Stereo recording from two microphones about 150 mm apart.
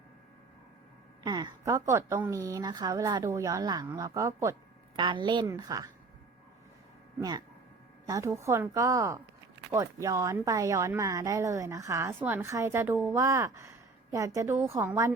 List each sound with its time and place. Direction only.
1.2 s speech: 25° right (ahead or behind)
4.9 s a woman's voice: 30° right (ahead or behind)
7.2 s speech: 25° right (ahead or behind)